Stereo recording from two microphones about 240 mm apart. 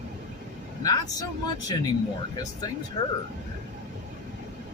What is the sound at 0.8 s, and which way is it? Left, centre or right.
Speech, centre.